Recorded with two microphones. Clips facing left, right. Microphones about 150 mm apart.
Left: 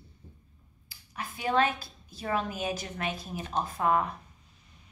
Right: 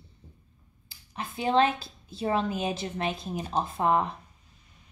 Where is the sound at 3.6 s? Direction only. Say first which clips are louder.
Right 1 dB; 25° right (ahead or behind).